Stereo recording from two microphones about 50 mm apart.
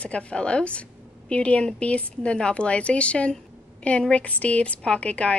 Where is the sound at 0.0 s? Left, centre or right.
Left.